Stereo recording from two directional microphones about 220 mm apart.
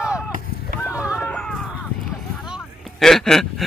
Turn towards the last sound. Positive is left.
turn(degrees=0)  # may be behind; listen again after turning